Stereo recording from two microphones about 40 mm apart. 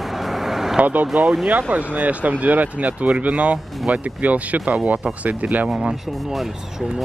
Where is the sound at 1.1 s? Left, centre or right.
Centre.